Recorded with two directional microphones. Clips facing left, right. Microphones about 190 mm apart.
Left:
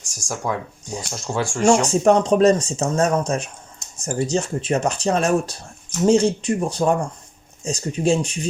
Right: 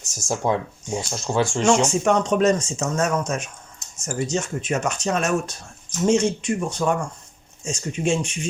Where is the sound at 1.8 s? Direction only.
35° left (ahead or behind).